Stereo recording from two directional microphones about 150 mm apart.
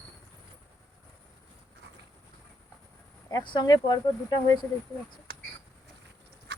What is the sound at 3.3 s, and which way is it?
Speech, 30° left (ahead or behind).